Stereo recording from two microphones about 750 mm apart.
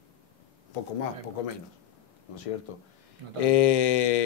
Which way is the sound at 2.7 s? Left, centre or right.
Left.